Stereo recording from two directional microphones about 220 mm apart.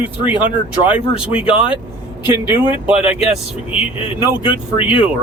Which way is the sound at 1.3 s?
25° left (ahead or behind).